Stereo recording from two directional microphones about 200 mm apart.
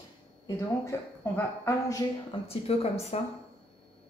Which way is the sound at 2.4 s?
30° left (ahead or behind).